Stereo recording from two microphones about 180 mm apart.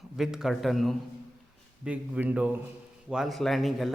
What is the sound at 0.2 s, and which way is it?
A man's voice, 5° right (ahead or behind).